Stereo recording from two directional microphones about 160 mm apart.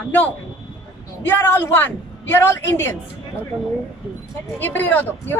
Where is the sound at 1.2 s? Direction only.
10° left (ahead or behind).